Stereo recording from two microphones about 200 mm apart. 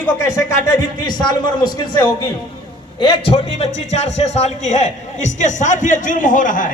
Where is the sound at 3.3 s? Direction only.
30° left (ahead or behind).